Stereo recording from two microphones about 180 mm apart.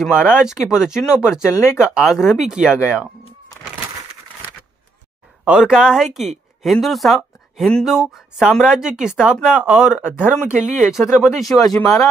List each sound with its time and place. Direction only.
0.4 s speech: 5° right (ahead or behind)
1.5 s speech: 15° left (ahead or behind)
1.9 s speech: centre (ahead or behind)
5.4 s speech: 5° right (ahead or behind)